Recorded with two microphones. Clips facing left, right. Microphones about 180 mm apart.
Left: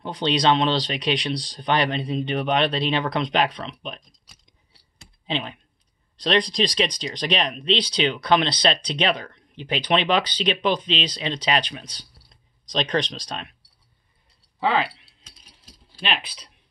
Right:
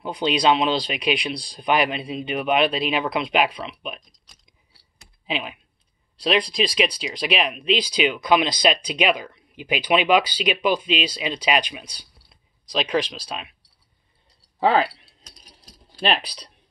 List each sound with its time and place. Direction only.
0.0 s speech: 10° right (ahead or behind)
5.2 s speech: 10° right (ahead or behind)
14.6 s keys jangling: 40° right (ahead or behind)